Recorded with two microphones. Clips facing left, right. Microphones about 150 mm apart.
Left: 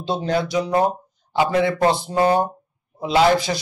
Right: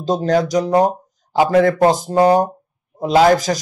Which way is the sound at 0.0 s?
40° right (ahead or behind).